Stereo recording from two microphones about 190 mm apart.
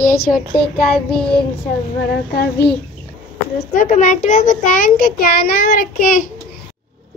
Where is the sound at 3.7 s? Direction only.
40° left (ahead or behind).